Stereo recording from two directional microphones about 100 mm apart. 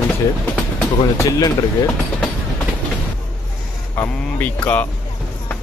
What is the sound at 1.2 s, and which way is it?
Speech, 35° left (ahead or behind).